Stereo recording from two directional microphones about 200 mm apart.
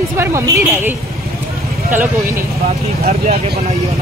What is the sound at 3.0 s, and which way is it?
Speech, 35° right (ahead or behind).